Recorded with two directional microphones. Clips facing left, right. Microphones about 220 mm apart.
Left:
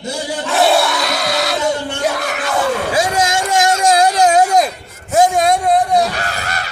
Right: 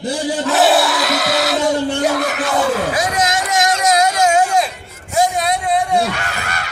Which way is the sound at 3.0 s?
30° left (ahead or behind).